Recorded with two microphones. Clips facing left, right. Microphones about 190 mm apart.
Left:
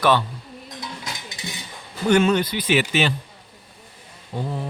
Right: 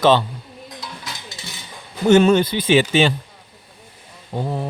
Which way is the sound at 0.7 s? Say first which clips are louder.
Left 1 dB; 20° left (ahead or behind).